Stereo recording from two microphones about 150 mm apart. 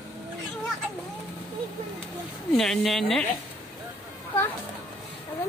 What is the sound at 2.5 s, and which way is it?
Speech, 5° left (ahead or behind).